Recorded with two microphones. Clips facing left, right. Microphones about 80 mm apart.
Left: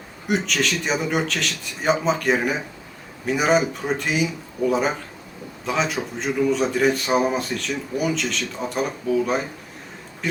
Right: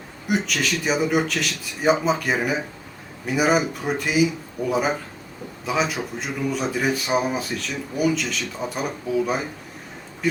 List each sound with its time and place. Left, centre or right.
0.3 s speech: centre
4.6 s speech: right
5.6 s speech: centre